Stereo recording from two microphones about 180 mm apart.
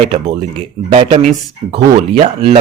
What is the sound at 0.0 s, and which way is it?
Speech, 35° right (ahead or behind).